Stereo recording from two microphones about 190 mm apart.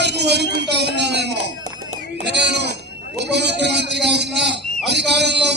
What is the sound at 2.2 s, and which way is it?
A man's voice, 65° right (ahead or behind).